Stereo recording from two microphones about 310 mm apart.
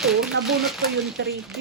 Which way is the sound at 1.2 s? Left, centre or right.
Right.